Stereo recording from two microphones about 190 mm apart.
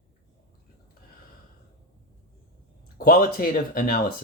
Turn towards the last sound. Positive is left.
turn(degrees=50)  # may be behind; listen again after turning